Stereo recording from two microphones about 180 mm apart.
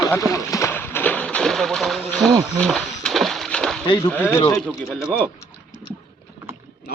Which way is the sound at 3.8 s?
25° left (ahead or behind).